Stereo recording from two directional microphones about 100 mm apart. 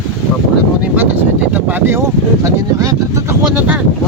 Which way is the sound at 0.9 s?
15° right (ahead or behind).